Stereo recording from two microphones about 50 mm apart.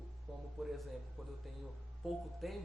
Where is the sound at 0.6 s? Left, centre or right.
Centre.